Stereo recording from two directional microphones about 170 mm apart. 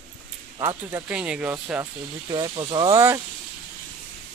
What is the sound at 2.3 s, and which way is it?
Speech, 25° right (ahead or behind).